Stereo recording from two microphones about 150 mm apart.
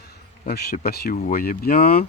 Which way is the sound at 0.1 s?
90° left.